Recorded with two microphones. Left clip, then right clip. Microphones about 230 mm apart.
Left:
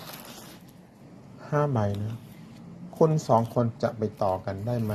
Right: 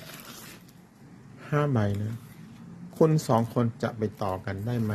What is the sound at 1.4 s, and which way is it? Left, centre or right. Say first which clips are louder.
Speech: left 1 dB; right.